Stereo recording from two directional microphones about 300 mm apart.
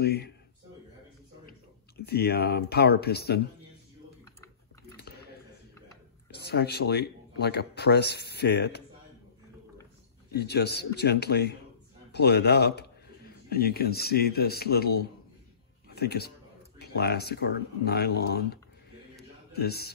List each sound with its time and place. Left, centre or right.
0.0 s speech: left
2.0 s speech: left
6.3 s speech: left
10.3 s a man's voice: left